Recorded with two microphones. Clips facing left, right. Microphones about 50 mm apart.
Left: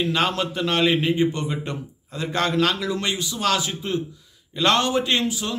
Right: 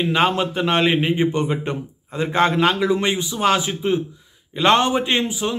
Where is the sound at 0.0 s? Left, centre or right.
Right.